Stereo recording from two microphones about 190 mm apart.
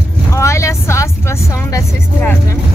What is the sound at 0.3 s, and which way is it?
Vehicle, 15° left (ahead or behind).